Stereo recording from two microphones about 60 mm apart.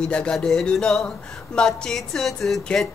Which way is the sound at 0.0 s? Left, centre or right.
Centre.